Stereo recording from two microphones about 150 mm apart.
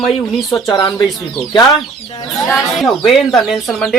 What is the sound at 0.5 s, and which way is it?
Speech, 25° left (ahead or behind).